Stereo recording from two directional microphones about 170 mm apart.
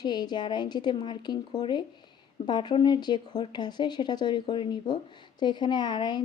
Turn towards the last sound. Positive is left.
turn(degrees=25)  # may be behind; listen again after turning